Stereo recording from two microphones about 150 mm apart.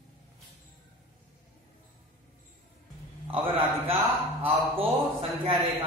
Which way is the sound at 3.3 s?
40° right (ahead or behind).